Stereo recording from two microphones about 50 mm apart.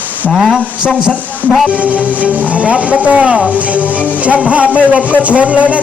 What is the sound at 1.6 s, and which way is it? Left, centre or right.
Speech, right.